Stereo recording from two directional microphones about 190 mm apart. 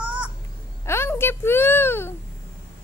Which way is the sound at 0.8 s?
15° left (ahead or behind).